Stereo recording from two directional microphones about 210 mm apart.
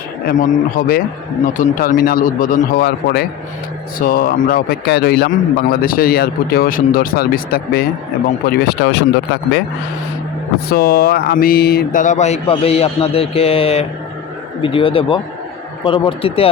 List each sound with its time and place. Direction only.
0.3 s a man's voice: 40° left (ahead or behind)
10.7 s a man's voice: 45° left (ahead or behind); by 16.5 s 25° left (ahead or behind)